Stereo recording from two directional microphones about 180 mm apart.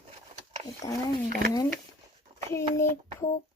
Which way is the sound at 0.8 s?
20° left (ahead or behind).